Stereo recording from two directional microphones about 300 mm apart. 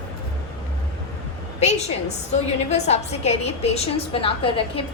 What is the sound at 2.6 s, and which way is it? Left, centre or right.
A woman's voice, left.